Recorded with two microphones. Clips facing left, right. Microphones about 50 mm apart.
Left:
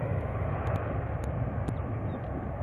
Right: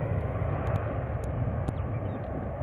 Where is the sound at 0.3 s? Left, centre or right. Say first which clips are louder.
Right 1 dB; centre.